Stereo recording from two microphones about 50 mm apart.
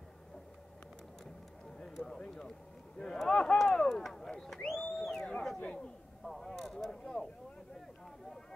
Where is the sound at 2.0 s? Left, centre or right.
Centre.